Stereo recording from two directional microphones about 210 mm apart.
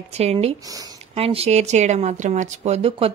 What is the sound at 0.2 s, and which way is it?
Speech, 30° right (ahead or behind).